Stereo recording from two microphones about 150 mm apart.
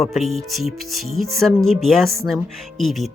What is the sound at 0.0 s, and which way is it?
Speech, centre (ahead or behind).